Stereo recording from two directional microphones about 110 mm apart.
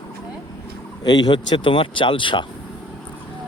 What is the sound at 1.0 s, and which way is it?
Speech, 40° left (ahead or behind).